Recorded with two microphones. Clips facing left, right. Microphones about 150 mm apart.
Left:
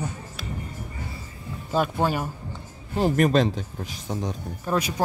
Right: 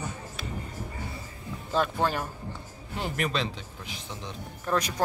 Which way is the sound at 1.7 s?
10° left (ahead or behind).